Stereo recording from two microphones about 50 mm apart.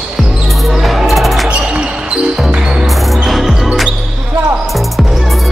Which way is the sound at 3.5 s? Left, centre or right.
Centre.